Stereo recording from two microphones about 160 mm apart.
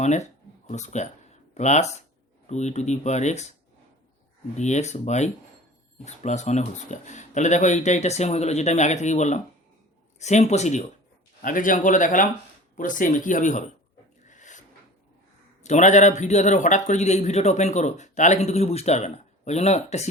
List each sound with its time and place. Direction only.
0.0 s a man's voice: 45° left (ahead or behind)
4.5 s a man's voice: 45° left (ahead or behind)
11.4 s a man's voice: 55° left (ahead or behind)
14.3 s a sound: 50° left (ahead or behind)
15.6 s a man's voice: 45° left (ahead or behind)